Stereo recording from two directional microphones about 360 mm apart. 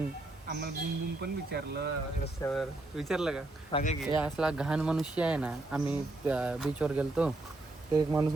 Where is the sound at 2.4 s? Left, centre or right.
Centre.